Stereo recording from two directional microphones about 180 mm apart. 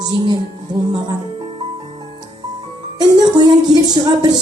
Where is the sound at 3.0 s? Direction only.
20° right (ahead or behind).